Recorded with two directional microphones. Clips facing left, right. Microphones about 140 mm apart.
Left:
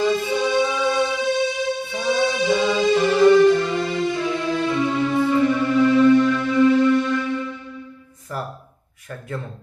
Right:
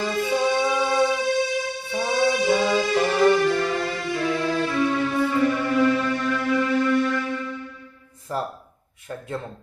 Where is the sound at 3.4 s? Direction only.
20° left (ahead or behind).